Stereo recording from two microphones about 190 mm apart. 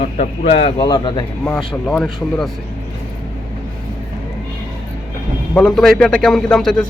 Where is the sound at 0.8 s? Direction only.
25° left (ahead or behind).